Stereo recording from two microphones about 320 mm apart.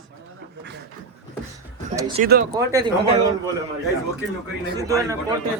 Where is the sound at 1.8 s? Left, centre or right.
Right.